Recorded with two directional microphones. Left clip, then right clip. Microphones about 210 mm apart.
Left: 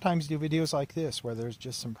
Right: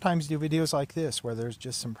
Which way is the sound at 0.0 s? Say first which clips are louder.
Right 1 dB; 25° right (ahead or behind).